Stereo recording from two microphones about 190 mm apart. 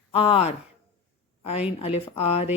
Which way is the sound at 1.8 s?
30° left (ahead or behind).